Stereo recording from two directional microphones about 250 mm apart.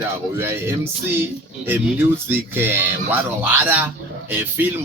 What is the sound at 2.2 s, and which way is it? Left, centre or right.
Speech, centre.